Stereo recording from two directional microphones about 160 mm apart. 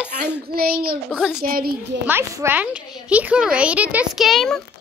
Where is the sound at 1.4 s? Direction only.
70° right (ahead or behind).